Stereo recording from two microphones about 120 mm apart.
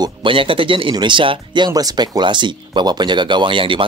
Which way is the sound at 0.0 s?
45° right (ahead or behind).